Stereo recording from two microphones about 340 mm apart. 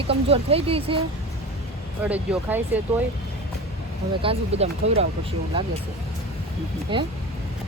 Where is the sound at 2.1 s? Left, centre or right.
Centre.